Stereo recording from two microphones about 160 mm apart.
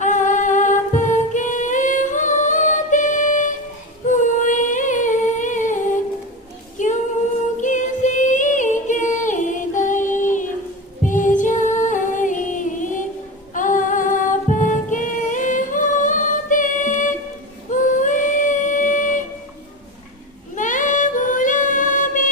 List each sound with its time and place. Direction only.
0.0 s music: 50° left (ahead or behind)
4.0 s humming: 50° left (ahead or behind)
6.7 s singing: 50° left (ahead or behind)
7.6 s music: 50° left (ahead or behind)
17.7 s child singing: 55° left (ahead or behind)
20.6 s child singing: 50° left (ahead or behind)